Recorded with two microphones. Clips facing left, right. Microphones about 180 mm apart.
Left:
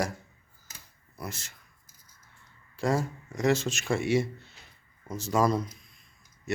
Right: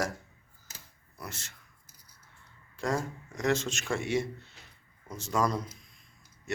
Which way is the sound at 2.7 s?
10° left (ahead or behind).